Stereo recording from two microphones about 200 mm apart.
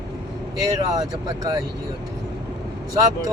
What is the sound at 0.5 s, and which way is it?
Speech, 15° right (ahead or behind).